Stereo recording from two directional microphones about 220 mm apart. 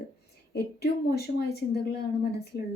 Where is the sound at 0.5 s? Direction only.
45° left (ahead or behind).